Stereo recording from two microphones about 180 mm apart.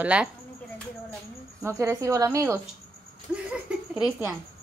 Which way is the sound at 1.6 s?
15° right (ahead or behind).